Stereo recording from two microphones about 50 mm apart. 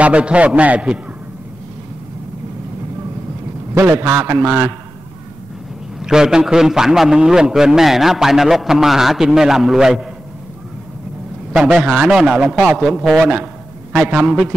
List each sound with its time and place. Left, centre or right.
0.0 s a man's voice: right
3.8 s a man's voice: right
5.9 s a man's voice: centre
11.5 s a man's voice: centre
13.9 s a man's voice: right